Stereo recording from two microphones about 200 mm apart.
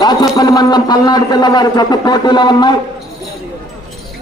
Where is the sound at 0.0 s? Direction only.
20° left (ahead or behind).